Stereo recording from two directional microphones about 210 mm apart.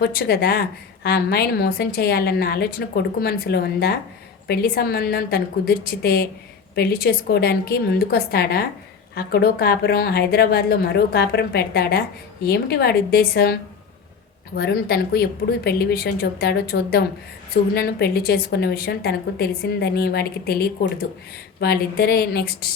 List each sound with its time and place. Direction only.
0.0 s a woman's voice: 45° left (ahead or behind)